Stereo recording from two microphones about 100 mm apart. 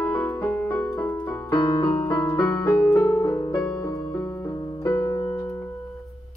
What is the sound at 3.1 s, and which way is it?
Music, 25° left (ahead or behind).